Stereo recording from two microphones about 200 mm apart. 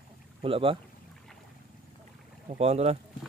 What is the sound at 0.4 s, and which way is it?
Speech, 25° right (ahead or behind).